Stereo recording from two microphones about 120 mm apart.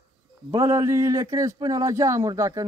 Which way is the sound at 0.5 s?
25° right (ahead or behind).